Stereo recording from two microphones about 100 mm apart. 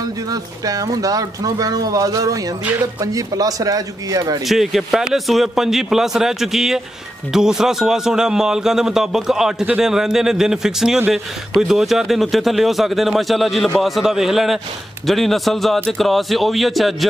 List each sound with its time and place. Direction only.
0.0 s speech: 40° right (ahead or behind)
4.5 s a man's voice: centre (ahead or behind)